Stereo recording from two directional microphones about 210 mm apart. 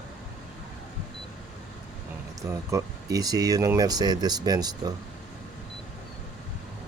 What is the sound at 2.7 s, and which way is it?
Speech, 15° right (ahead or behind).